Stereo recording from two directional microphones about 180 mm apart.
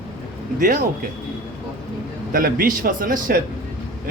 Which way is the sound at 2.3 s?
50° right (ahead or behind).